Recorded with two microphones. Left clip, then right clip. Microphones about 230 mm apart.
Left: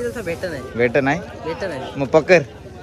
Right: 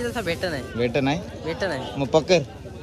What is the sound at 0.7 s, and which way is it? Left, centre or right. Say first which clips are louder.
Speech: left 7 dB; centre.